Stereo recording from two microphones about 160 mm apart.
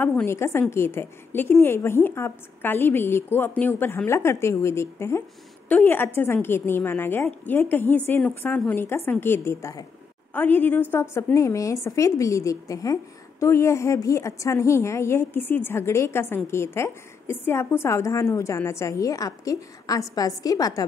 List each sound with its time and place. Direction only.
0.0 s a woman's voice: 15° left (ahead or behind)